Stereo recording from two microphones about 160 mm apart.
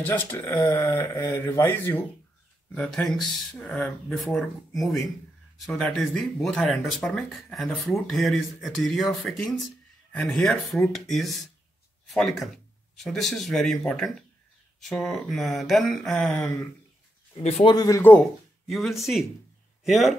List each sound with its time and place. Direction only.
0.2 s speech: 15° left (ahead or behind)
17.4 s speech: 40° left (ahead or behind)
17.6 s speech: 25° left (ahead or behind)
18.7 s a man's voice: centre (ahead or behind)